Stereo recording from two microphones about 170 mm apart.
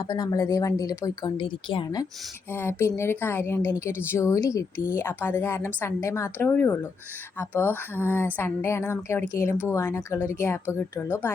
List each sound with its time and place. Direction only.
0.0 s speech: 20° left (ahead or behind)
2.5 s speech: 15° left (ahead or behind)